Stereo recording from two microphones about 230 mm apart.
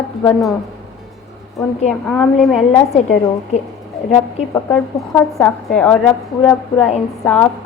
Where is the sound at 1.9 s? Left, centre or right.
Centre.